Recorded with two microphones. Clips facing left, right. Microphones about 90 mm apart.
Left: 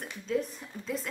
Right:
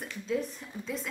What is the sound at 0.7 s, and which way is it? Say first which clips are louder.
Speech: right 2 dB; 10° right (ahead or behind).